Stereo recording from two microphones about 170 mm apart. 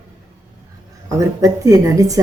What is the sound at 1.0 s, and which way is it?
Speech, 20° right (ahead or behind).